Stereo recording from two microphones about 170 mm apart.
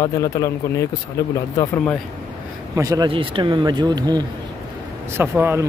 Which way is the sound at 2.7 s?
20° right (ahead or behind).